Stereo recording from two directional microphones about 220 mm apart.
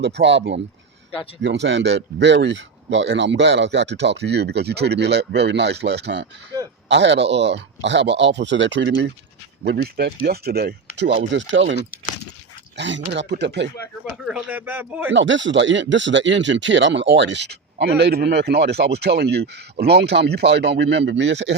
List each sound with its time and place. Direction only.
0.0 s speech: 55° right (ahead or behind)
11.3 s speech: 55° right (ahead or behind)
14.1 s speech: 5° right (ahead or behind)
15.1 s speech: 55° right (ahead or behind)